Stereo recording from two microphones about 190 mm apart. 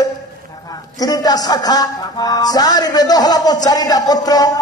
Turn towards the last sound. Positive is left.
turn(degrees=20)  # may be behind; listen again after turning